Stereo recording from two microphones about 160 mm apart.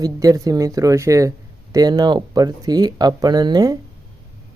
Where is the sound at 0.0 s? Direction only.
25° right (ahead or behind).